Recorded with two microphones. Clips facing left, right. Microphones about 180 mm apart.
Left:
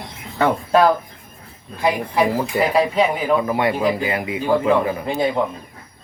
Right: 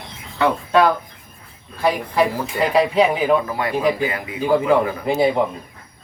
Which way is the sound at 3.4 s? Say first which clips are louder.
Left 1 dB; 25° left (ahead or behind).